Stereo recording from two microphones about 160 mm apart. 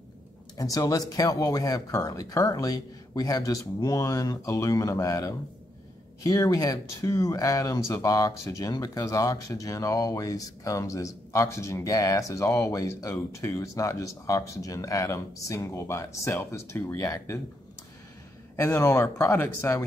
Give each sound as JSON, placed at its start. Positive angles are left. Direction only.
{"t": 0.6, "sound": "speech", "side_deg": 20}
{"t": 18.6, "sound": "speech", "side_deg": 20}